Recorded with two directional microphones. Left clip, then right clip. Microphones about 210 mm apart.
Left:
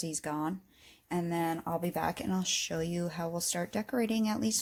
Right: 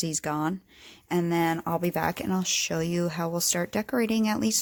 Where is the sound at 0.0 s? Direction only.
35° right (ahead or behind).